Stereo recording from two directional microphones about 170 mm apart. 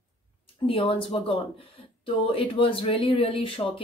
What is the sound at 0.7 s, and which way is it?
Speech, 30° left (ahead or behind).